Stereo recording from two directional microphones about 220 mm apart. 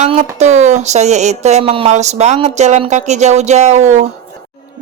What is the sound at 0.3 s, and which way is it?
Speech, 30° right (ahead or behind).